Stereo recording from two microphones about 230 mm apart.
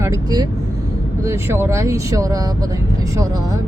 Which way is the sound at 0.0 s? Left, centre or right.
Centre.